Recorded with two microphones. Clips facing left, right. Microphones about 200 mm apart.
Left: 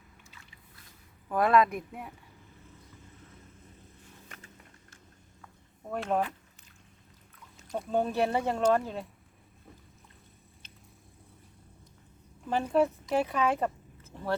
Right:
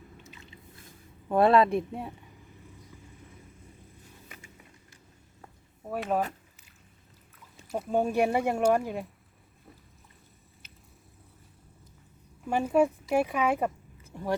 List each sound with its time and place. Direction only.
0.2 s boat: 20° right (ahead or behind)
1.3 s speech: 30° right (ahead or behind)
4.3 s a sound: 10° right (ahead or behind)
5.8 s speech: 5° right (ahead or behind)
7.7 s speech: 10° right (ahead or behind)
12.5 s a woman's voice: 10° right (ahead or behind)